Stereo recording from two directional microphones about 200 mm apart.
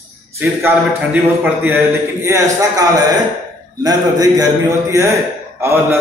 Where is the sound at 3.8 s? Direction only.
20° right (ahead or behind).